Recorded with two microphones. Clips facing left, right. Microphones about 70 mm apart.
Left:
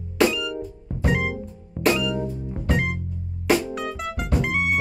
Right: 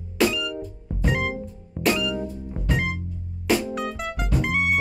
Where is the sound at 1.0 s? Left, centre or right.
Centre.